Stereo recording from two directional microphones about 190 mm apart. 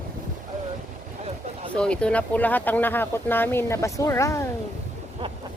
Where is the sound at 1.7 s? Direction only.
5° left (ahead or behind).